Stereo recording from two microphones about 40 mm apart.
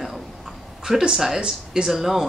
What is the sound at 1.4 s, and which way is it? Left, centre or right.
Speech, right.